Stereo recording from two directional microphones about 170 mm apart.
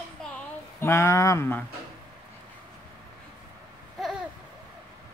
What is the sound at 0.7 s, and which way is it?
Speech, 15° left (ahead or behind).